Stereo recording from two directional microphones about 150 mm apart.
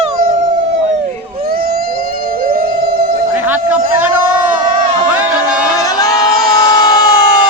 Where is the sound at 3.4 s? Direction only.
10° right (ahead or behind).